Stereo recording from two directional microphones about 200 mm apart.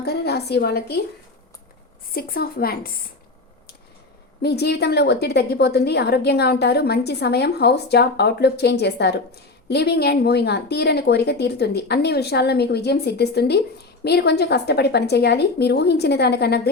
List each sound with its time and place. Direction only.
0.0 s a woman's voice: 55° left (ahead or behind)
2.1 s a woman's voice: 50° left (ahead or behind)
4.4 s a woman's voice: 55° left (ahead or behind)